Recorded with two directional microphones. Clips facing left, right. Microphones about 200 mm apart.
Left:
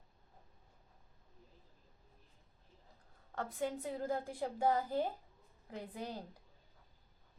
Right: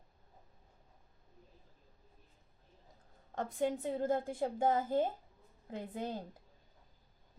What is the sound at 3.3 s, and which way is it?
A woman's voice, 20° right (ahead or behind).